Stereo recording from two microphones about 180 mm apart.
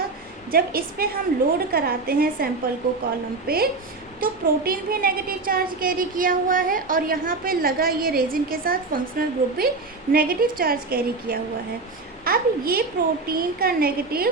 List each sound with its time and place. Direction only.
0.5 s a woman's voice: 55° right (ahead or behind)